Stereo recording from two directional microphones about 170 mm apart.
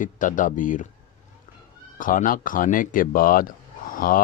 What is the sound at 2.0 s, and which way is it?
Speech, 50° left (ahead or behind).